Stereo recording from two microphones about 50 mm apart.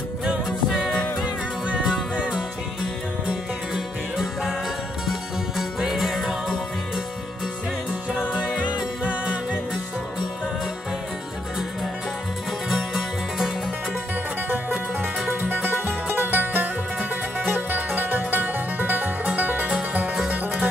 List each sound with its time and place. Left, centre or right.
0.2 s music: centre
5.6 s music: centre
8.1 s music: centre
12.6 s music: centre
15.4 s music: right
17.4 s music: right